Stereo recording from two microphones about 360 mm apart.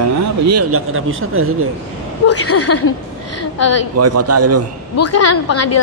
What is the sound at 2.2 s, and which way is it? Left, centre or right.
A woman's voice, left.